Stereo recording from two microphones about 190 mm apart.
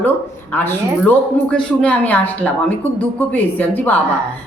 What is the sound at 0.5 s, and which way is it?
Speech, 10° left (ahead or behind).